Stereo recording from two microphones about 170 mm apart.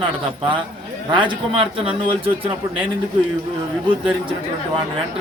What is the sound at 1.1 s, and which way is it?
Speech, 30° right (ahead or behind).